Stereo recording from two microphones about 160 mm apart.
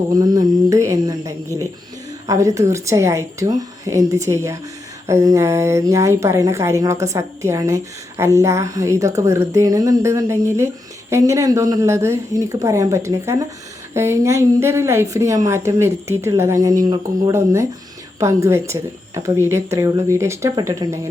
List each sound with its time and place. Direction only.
0.2 s mantra: 20° right (ahead or behind)
2.2 s speech: 20° right (ahead or behind)